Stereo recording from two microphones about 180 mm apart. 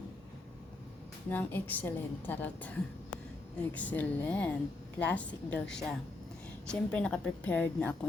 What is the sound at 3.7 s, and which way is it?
A woman's voice, 10° left (ahead or behind).